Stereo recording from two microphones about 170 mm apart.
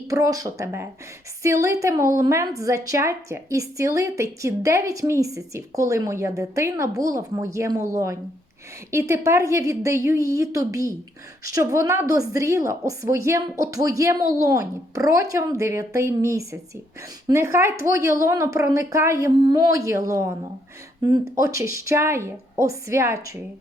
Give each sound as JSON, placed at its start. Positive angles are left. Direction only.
{"t": 0.1, "sound": "a woman's voice", "side_deg": -20}